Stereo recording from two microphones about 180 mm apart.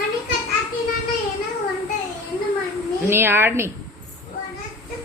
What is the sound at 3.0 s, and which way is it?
Speech, 10° right (ahead or behind).